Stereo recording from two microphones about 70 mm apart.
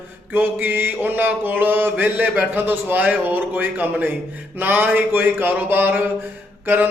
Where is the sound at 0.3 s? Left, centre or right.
Right.